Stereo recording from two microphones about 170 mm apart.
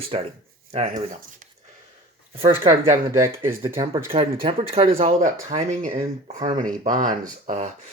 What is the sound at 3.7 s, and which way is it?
Speech, 20° right (ahead or behind).